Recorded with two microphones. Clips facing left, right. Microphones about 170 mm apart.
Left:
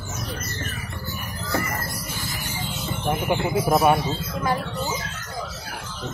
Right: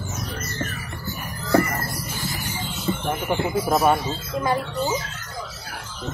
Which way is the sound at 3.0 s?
10° left (ahead or behind).